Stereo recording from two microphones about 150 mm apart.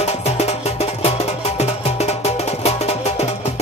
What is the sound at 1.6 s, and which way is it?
Music, 45° left (ahead or behind).